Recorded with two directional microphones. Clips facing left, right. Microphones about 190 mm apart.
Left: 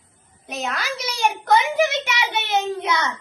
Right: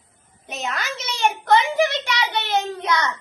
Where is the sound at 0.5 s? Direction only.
Centre (ahead or behind).